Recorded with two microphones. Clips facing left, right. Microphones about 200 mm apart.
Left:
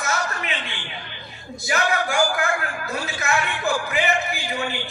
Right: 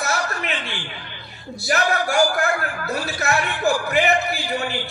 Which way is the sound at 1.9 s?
40° right (ahead or behind).